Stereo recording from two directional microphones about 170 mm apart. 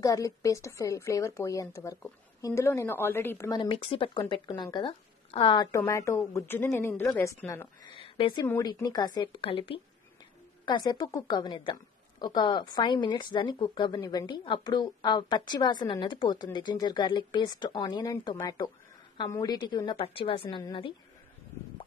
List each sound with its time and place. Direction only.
0.0 s a woman's voice: 20° left (ahead or behind)
7.9 s speech: 30° left (ahead or behind)
8.5 s a woman's voice: 15° left (ahead or behind)